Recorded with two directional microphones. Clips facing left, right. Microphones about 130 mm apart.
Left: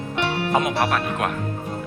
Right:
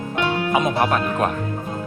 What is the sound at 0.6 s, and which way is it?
Speech, 35° right (ahead or behind).